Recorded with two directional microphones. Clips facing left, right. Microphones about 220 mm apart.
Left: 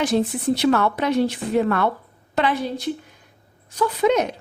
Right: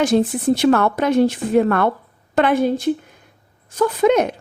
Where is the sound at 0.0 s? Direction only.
50° right (ahead or behind).